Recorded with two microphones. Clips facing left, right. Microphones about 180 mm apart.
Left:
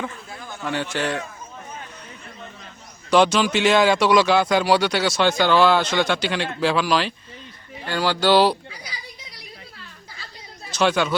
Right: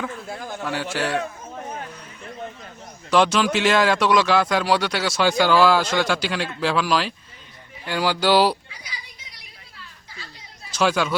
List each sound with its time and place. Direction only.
0.6 s speech: 5° right (ahead or behind)
3.1 s speech: centre (ahead or behind)
8.8 s children playing: 35° left (ahead or behind)
10.8 s speech: centre (ahead or behind)